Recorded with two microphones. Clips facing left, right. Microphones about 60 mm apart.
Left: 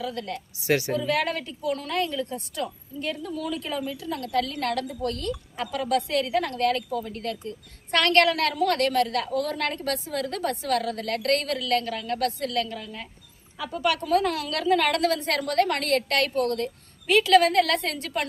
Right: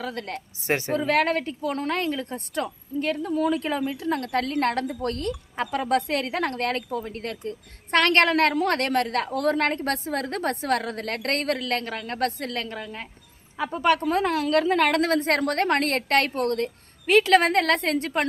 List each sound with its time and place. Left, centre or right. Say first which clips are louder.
0.0 s speech: even; right